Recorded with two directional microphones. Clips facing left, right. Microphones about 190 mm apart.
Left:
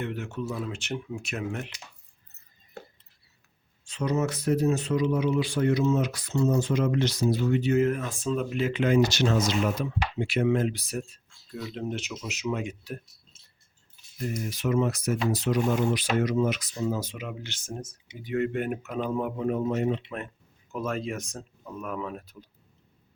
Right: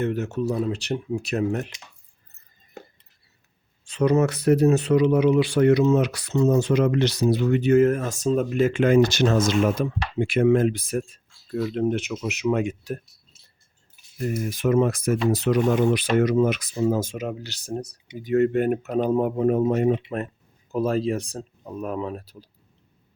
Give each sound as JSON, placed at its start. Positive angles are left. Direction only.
{"t": 0.0, "sound": "speech", "side_deg": -40}
{"t": 3.8, "sound": "speech", "side_deg": -60}
{"t": 14.5, "sound": "speech", "side_deg": -50}